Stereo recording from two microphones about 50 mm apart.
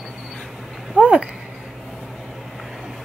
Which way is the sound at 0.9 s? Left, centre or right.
Right.